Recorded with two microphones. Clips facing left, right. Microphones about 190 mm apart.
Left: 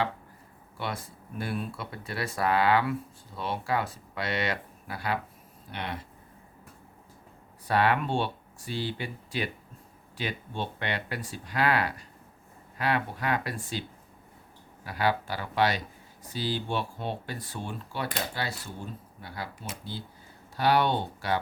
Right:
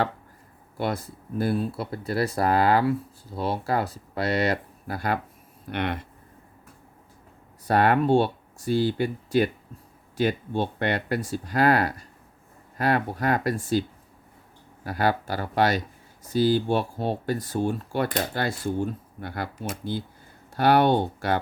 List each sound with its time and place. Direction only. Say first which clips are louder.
0.8 s speech: right 7 dB; 40° right (ahead or behind)
5.7 s speech: right 8 dB; 60° right (ahead or behind)
7.7 s speech: right 6 dB; 45° right (ahead or behind)
14.8 s speech: right 4 dB; 45° right (ahead or behind)